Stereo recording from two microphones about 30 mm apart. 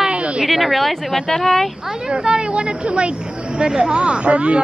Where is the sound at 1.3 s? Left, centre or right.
Centre.